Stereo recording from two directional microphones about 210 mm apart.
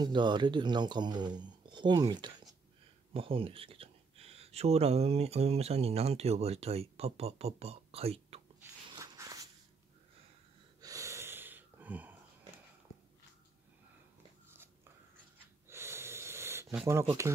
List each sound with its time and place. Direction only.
0.0 s speech: 20° right (ahead or behind)
8.9 s walk: 15° right (ahead or behind)
10.8 s gasp: 15° right (ahead or behind)
15.7 s a sound: 10° right (ahead or behind)